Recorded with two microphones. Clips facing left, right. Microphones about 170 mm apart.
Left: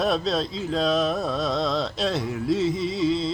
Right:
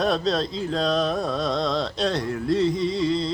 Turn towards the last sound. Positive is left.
turn(degrees=0)  # may be behind; listen again after turning